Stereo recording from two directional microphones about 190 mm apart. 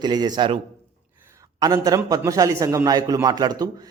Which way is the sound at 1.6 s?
20° right (ahead or behind).